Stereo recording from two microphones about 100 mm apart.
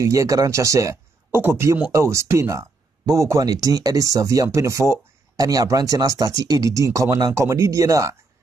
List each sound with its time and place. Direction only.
0.0 s speech: 35° right (ahead or behind)